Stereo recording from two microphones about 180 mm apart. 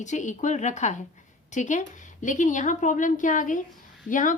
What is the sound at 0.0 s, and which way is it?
A woman's voice, 40° left (ahead or behind).